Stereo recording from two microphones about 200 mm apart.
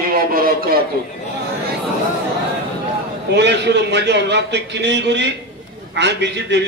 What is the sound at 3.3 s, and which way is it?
A man's voice, 60° right (ahead or behind).